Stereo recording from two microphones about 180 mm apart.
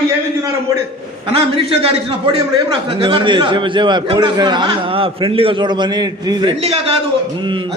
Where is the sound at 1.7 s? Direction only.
35° right (ahead or behind).